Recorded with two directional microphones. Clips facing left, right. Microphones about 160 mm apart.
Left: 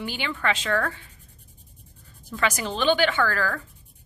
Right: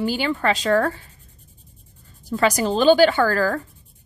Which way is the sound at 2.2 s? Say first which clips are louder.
Right 7 dB; 35° right (ahead or behind).